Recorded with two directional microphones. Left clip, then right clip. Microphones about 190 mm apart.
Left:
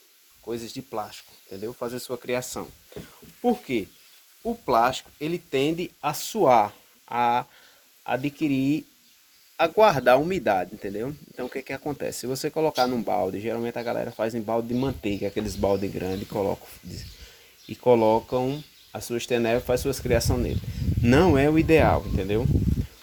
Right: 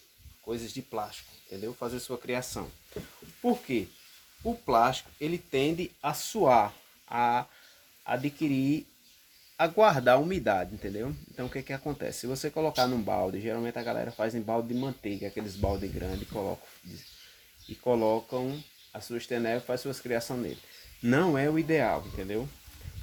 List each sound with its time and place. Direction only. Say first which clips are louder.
0.4 s speech: left 3 dB; 45° left (ahead or behind)
17.8 s speech: left 7 dB; 40° left (ahead or behind)